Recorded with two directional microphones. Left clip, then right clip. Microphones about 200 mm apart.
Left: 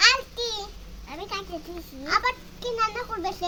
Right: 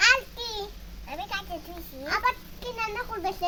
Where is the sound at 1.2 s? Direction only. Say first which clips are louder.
Even; 15° right (ahead or behind).